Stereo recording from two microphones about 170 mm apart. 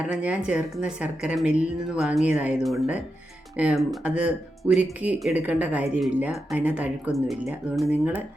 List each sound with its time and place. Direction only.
0.1 s speech: 5° right (ahead or behind)